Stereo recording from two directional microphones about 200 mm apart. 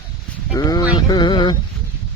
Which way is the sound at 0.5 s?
20° left (ahead or behind).